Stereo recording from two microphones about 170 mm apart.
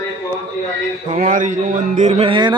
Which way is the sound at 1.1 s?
50° right (ahead or behind).